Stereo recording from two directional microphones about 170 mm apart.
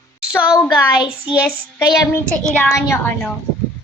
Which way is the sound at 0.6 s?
25° left (ahead or behind).